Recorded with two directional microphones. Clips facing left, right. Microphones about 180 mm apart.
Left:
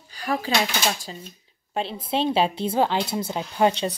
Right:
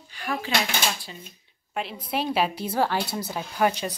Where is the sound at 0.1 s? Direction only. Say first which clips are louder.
Left 4 dB; 40° left (ahead or behind).